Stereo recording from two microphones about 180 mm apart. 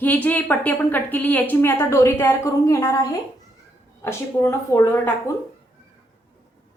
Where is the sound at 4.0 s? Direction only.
15° left (ahead or behind).